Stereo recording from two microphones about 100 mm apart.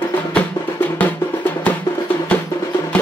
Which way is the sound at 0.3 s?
15° left (ahead or behind).